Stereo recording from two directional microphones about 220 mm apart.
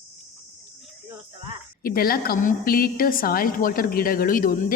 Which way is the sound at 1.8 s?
40° left (ahead or behind).